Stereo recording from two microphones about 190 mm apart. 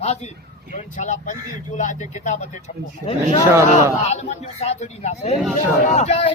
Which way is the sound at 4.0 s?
35° left (ahead or behind).